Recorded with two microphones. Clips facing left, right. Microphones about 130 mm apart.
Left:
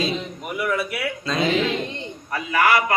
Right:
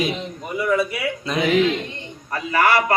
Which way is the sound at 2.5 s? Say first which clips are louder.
Right 1 dB; 30° right (ahead or behind).